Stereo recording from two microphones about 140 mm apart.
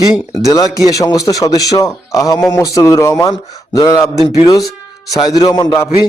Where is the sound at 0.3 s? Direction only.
25° left (ahead or behind).